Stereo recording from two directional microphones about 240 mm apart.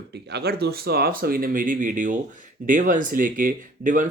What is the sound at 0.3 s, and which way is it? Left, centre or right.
Speech, right.